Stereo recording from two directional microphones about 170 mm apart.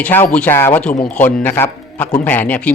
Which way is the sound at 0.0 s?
10° left (ahead or behind).